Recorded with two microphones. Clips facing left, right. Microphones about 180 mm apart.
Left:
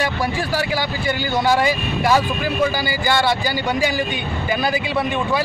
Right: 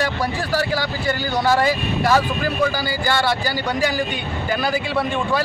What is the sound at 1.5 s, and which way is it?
Speech, 15° left (ahead or behind).